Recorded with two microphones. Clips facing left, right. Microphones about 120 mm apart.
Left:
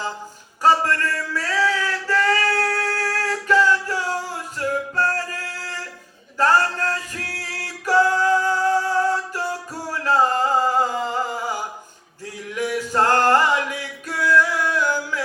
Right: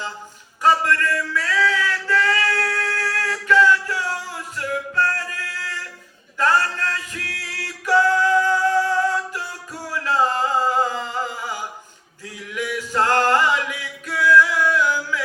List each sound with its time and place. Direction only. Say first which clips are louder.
0.6 s a sound: even; 35° left (ahead or behind)
6.3 s male singing: left 2 dB; 40° left (ahead or behind)
12.5 s music: left 2 dB; 40° left (ahead or behind)